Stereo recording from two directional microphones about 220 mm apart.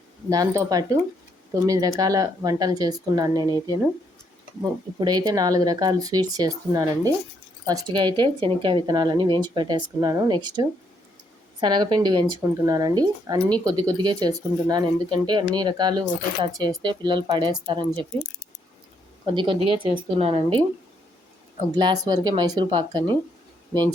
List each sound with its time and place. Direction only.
0.3 s speech: 15° right (ahead or behind)
4.6 s speech: 20° right (ahead or behind)
19.2 s speech: 20° right (ahead or behind)
21.8 s speech: 20° right (ahead or behind)